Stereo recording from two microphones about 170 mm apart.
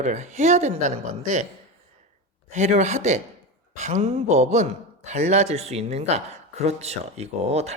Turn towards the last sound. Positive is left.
turn(degrees=-40)  # may be behind; listen again after turning